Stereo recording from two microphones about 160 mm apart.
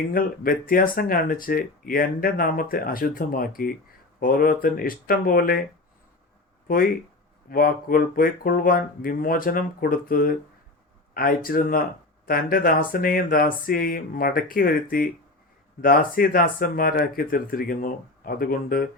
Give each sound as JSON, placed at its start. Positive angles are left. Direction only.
{"t": 0.1, "sound": "speech", "side_deg": 60}
{"t": 6.7, "sound": "speech", "side_deg": 65}